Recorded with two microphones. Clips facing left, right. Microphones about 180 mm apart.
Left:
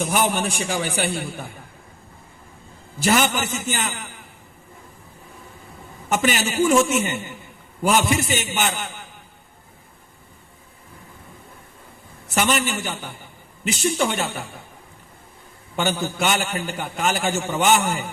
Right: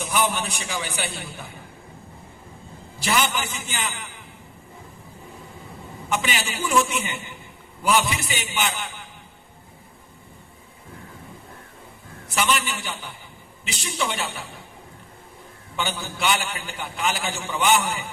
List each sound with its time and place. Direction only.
0.0 s a man's voice: 50° left (ahead or behind)
3.0 s a man's voice: 45° left (ahead or behind)
6.1 s a man's voice: 45° left (ahead or behind)
12.3 s a man's voice: 45° left (ahead or behind)
13.8 s a man's voice: 45° left (ahead or behind)
15.7 s a man's voice: 45° left (ahead or behind)